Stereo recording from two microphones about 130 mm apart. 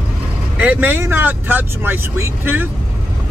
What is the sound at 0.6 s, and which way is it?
Speech, 10° right (ahead or behind).